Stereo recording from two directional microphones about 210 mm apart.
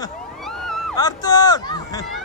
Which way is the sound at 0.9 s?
20° left (ahead or behind).